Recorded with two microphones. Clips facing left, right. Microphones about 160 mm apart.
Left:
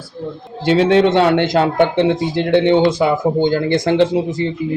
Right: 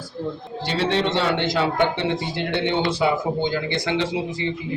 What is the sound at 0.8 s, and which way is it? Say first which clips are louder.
A man's voice: left 9 dB; 50° left (ahead or behind).